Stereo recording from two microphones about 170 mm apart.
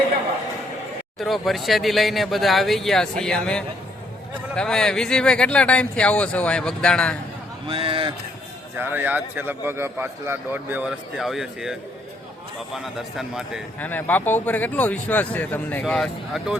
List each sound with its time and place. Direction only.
1.2 s speech: centre (ahead or behind)
7.7 s speech: 30° right (ahead or behind)
8.8 s a man's voice: 10° right (ahead or behind)
13.7 s speech: 10° left (ahead or behind)
15.8 s speech: centre (ahead or behind)